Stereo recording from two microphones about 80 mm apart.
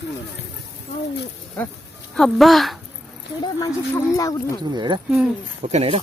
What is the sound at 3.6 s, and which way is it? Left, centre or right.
Speech, left.